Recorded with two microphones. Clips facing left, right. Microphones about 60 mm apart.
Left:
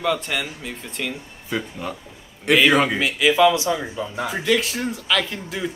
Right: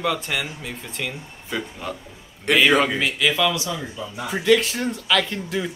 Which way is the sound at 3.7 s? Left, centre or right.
Left.